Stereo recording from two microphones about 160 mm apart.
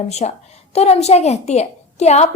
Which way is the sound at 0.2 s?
45° left (ahead or behind).